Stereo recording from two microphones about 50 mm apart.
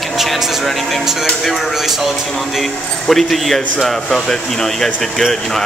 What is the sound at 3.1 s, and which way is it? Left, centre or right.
A man's voice, centre.